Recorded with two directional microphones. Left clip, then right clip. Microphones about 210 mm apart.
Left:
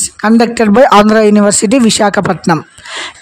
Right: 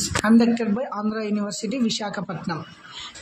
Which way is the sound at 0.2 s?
55° left (ahead or behind).